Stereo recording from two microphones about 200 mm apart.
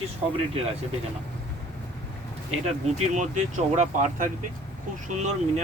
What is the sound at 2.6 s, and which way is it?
Speech, 35° right (ahead or behind).